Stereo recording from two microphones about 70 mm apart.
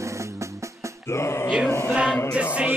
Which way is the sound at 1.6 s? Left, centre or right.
Left.